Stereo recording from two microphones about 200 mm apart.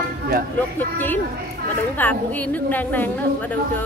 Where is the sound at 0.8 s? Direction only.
10° left (ahead or behind).